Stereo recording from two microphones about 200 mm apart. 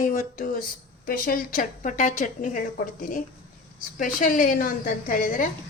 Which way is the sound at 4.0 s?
40° left (ahead or behind).